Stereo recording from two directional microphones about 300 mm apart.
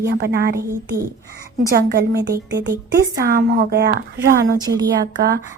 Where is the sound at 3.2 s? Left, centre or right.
Right.